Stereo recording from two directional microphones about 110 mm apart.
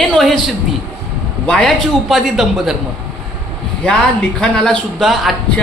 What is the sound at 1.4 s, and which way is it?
Speech, 10° left (ahead or behind).